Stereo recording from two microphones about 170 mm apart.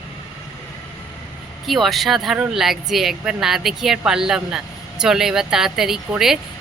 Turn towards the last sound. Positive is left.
turn(degrees=0)  # may be behind; listen again after turning